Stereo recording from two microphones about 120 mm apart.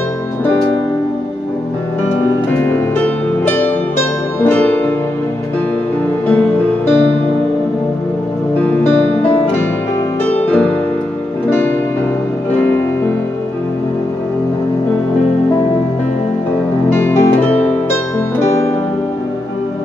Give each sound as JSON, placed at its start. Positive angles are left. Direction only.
{"t": 2.5, "sound": "music", "side_deg": 15}
{"t": 6.2, "sound": "music", "side_deg": 15}
{"t": 8.5, "sound": "music", "side_deg": 15}
{"t": 16.9, "sound": "music", "side_deg": 20}